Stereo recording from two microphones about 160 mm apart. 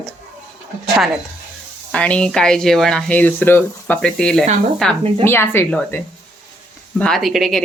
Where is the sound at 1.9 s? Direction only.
5° left (ahead or behind).